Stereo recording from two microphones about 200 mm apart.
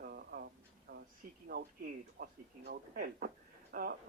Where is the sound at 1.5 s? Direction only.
50° right (ahead or behind).